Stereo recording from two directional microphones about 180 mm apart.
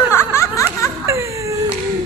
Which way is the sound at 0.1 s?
15° left (ahead or behind).